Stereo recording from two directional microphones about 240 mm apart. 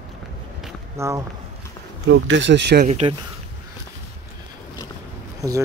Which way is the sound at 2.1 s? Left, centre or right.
Right.